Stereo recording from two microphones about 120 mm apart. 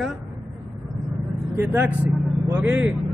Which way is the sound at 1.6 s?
15° right (ahead or behind).